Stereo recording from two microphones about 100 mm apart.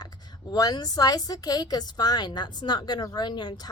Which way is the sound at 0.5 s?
40° left (ahead or behind).